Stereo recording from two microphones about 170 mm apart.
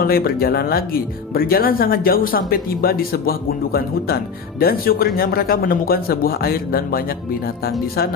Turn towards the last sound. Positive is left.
turn(degrees=60)  # may be behind; listen again after turning